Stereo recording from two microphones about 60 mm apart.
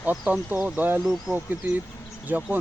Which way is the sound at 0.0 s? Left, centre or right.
Right.